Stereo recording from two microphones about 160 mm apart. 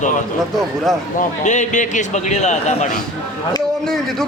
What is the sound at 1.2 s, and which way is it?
A man's voice, 50° left (ahead or behind).